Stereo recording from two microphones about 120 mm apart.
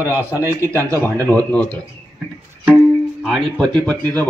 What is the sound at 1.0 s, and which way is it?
Speech, 15° left (ahead or behind).